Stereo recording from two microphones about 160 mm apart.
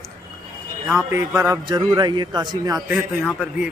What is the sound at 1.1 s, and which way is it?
A man's voice, 20° right (ahead or behind).